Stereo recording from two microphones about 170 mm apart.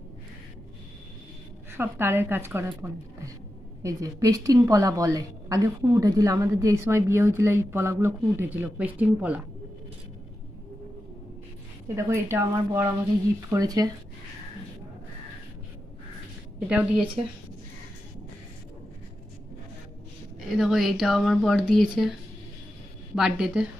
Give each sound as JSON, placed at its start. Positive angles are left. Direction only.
{"t": 1.7, "sound": "a woman's voice", "side_deg": -15}
{"t": 11.9, "sound": "a woman's voice", "side_deg": -15}
{"t": 16.5, "sound": "speech", "side_deg": -5}
{"t": 20.3, "sound": "speech", "side_deg": -5}
{"t": 23.1, "sound": "speech", "side_deg": -5}